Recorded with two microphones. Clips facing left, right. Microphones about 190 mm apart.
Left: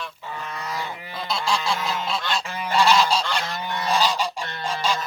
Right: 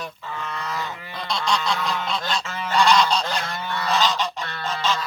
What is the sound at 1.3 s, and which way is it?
Goose, 5° left (ahead or behind).